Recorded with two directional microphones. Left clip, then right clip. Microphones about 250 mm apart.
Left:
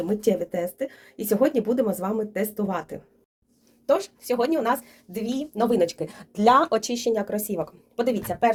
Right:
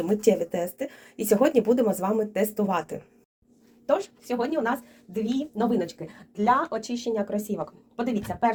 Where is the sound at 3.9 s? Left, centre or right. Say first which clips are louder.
Left 3 dB; left.